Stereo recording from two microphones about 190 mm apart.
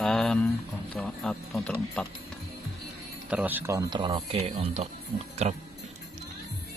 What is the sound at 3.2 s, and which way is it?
Speech, 10° right (ahead or behind).